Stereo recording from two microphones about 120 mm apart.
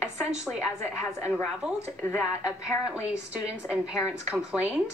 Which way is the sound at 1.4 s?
20° left (ahead or behind).